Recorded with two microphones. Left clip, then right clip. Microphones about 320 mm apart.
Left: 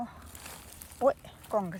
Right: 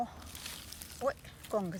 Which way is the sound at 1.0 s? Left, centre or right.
Centre.